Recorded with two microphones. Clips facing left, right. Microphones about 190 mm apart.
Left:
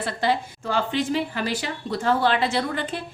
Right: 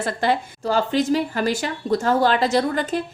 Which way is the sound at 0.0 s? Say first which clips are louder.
Right 2 dB; 50° right (ahead or behind).